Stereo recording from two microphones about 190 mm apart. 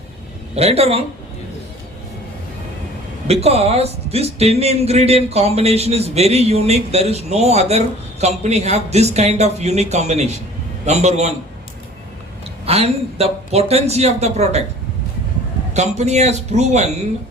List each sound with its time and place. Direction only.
0.5 s speech: 30° right (ahead or behind)
3.4 s speech: 30° right (ahead or behind)
12.6 s speech: 30° right (ahead or behind)
15.7 s speech: 35° right (ahead or behind)